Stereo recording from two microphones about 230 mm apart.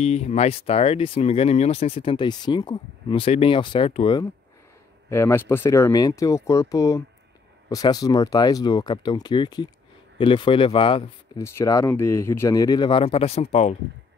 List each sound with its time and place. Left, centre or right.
0.0 s speech: left
5.1 s speech: centre; by 13.7 s left